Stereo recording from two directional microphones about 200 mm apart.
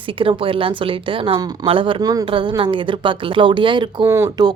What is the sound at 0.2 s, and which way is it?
Speech, 25° right (ahead or behind).